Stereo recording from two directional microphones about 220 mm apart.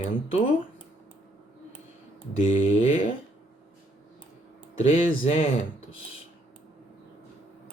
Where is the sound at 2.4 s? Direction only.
30° left (ahead or behind).